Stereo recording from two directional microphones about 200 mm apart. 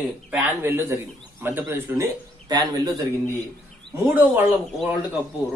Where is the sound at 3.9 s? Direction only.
10° right (ahead or behind).